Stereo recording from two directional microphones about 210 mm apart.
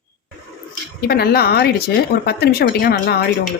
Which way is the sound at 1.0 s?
45° left (ahead or behind).